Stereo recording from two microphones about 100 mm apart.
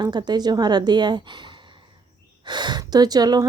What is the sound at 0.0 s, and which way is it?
Speech, 45° right (ahead or behind).